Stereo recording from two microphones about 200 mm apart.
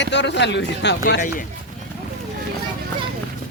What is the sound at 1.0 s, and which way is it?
Speech, 45° left (ahead or behind).